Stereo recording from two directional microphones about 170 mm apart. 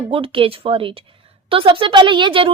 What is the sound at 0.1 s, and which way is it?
Speech, 30° right (ahead or behind).